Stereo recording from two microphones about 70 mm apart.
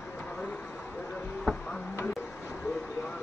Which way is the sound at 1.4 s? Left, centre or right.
Centre.